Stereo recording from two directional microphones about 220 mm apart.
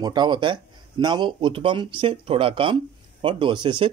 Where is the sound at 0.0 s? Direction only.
20° right (ahead or behind).